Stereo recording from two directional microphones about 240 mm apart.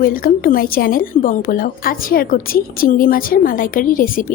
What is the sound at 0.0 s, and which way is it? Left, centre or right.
A woman's voice, left.